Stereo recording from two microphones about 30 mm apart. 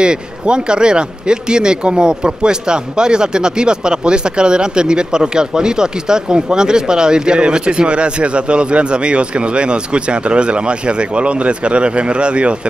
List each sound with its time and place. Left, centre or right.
0.0 s speech: right